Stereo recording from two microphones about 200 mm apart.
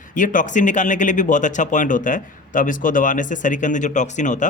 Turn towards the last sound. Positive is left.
turn(degrees=40)  # may be behind; listen again after turning